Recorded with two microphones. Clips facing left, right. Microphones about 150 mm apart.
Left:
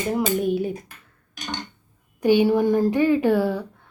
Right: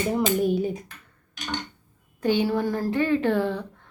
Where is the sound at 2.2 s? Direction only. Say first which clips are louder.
Left 5 dB; 15° left (ahead or behind).